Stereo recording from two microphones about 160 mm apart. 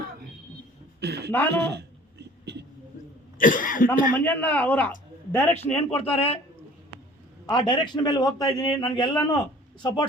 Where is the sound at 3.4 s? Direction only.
55° left (ahead or behind).